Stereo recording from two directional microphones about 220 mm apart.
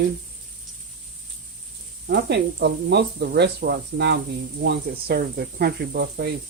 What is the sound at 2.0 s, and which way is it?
Speech, 50° right (ahead or behind).